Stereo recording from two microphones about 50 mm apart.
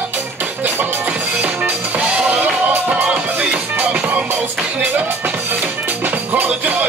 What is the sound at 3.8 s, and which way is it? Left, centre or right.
Music, right.